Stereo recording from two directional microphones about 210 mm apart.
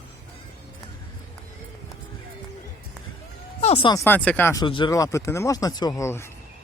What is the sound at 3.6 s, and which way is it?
Speech, 30° left (ahead or behind).